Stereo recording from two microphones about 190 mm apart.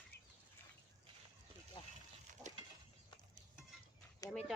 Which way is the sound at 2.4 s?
20° right (ahead or behind).